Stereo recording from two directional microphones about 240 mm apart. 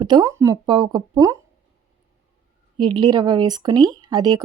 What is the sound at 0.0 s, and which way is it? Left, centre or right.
Speech, centre.